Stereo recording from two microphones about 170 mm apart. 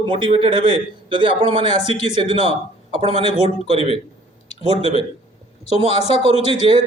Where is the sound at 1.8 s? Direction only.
40° left (ahead or behind).